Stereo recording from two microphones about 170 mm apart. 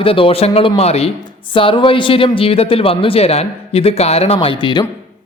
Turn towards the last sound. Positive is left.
turn(degrees=25)  # may be behind; listen again after turning